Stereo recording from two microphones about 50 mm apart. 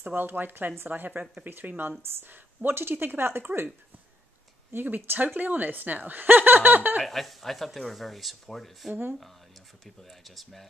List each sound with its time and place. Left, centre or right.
0.0 s speech: right
4.7 s speech: right
7.0 s speech: centre